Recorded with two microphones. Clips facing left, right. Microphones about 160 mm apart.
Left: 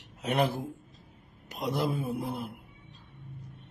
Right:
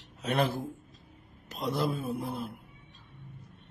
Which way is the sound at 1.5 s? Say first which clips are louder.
Even; 15° left (ahead or behind).